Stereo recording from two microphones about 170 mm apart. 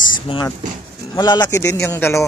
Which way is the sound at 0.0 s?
25° left (ahead or behind).